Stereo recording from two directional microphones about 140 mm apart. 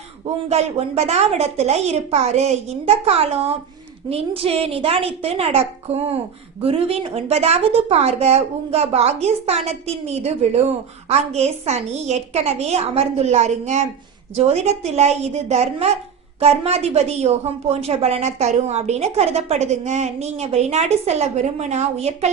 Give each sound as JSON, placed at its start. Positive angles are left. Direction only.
{"t": 0.4, "sound": "a woman's voice", "side_deg": -50}
{"t": 6.6, "sound": "a woman's voice", "side_deg": -45}